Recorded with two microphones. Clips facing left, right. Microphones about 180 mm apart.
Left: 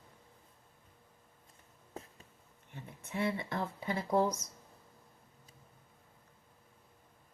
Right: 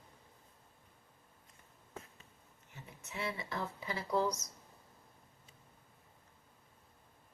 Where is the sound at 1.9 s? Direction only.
35° left (ahead or behind).